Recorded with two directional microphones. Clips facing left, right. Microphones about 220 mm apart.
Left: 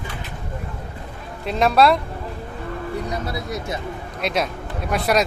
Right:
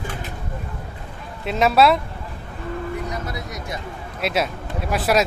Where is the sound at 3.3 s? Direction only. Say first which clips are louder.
Left 4 dB; 30° left (ahead or behind).